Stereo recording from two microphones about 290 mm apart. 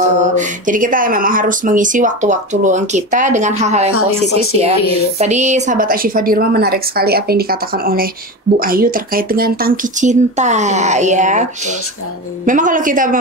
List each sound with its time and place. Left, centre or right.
0.2 s speech: right
3.9 s speech: left
5.2 s a woman's voice: right